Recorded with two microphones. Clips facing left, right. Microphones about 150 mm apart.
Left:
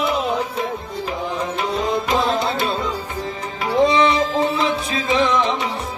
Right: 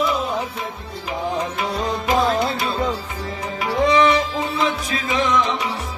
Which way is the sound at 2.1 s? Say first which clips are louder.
Right 4 dB; 25° left (ahead or behind).